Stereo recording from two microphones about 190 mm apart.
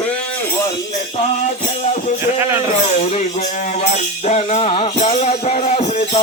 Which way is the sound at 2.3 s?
15° right (ahead or behind).